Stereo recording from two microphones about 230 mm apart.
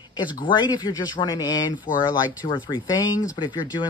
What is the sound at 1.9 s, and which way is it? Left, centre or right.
Speech, left.